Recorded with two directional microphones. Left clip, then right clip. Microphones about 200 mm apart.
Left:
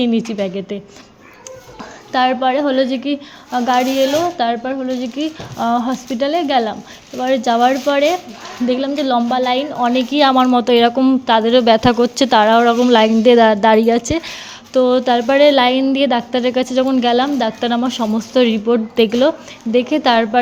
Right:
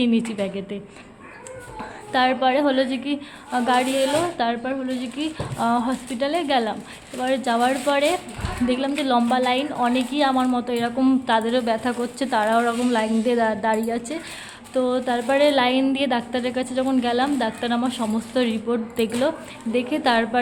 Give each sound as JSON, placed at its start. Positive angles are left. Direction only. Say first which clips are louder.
{"t": 0.0, "sound": "a woman's voice", "louder": "left 5 dB", "side_deg": 20}
{"t": 2.1, "sound": "a woman's voice", "louder": "left 4 dB", "side_deg": 20}